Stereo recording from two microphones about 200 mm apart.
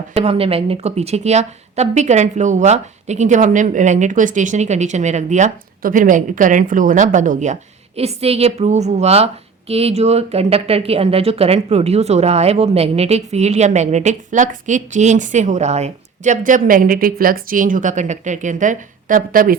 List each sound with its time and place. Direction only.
0.1 s a woman's voice: 30° right (ahead or behind)